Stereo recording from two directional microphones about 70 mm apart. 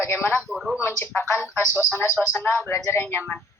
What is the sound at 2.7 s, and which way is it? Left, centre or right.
Speech, left.